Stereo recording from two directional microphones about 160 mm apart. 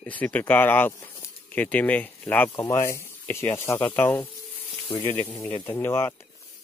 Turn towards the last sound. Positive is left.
turn(degrees=15)  # may be behind; listen again after turning